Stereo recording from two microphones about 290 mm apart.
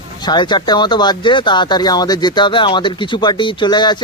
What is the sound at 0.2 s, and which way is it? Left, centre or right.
Speech, centre.